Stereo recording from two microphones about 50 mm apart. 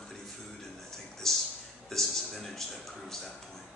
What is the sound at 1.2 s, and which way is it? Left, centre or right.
A man's voice, centre.